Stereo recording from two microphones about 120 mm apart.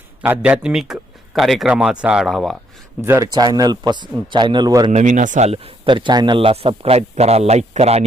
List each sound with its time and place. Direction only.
0.2 s a man's voice: 10° right (ahead or behind)
3.0 s speech: 20° right (ahead or behind)
3.3 s speech: 35° right (ahead or behind)
4.9 s speech: 80° right
5.8 s a man's voice: 40° right (ahead or behind); by 8.0 s 60° right (ahead or behind)